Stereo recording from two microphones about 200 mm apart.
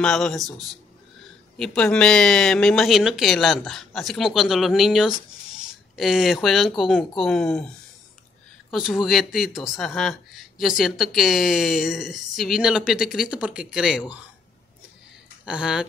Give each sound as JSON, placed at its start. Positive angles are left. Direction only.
{"t": 0.0, "sound": "a woman's voice", "side_deg": 5}
{"t": 1.6, "sound": "a woman's voice", "side_deg": 5}
{"t": 15.4, "sound": "a woman's voice", "side_deg": -5}